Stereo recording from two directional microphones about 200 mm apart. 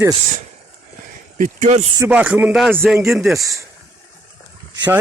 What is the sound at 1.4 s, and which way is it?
Speech, 40° right (ahead or behind).